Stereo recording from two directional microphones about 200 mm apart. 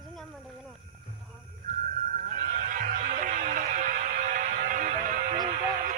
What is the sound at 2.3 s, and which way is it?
Music, 40° right (ahead or behind).